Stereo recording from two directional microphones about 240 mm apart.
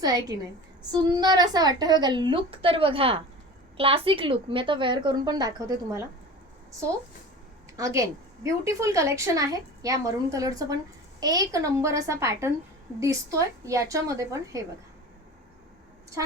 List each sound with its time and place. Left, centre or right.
0.0 s a woman's voice: centre
7.8 s a woman's voice: centre
13.7 s a woman's voice: centre